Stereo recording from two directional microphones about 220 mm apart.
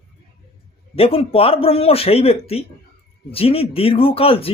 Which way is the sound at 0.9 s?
25° left (ahead or behind).